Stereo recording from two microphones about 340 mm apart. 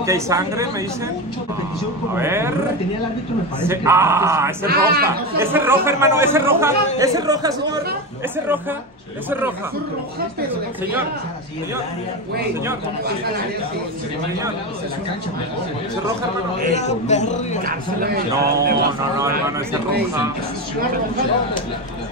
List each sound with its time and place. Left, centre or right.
0.0 s speech: centre
2.1 s speech: centre
3.6 s speech: centre
4.6 s a man's voice: right
5.0 s speech: centre
16.7 s a man's voice: centre
17.6 s a man's voice: right